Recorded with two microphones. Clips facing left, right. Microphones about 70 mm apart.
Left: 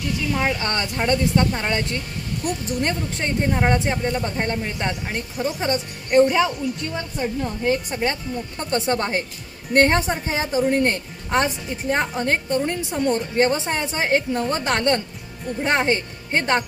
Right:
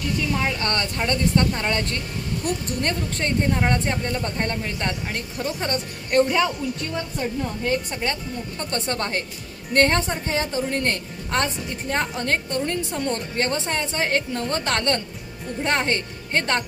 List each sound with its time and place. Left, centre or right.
0.3 s a woman's voice: centre